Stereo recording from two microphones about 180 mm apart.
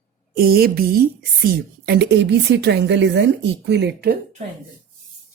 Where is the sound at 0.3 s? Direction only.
60° right (ahead or behind).